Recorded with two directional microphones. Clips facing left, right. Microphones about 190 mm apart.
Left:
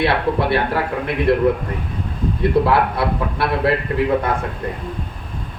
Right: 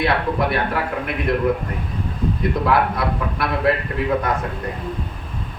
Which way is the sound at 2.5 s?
30° left (ahead or behind).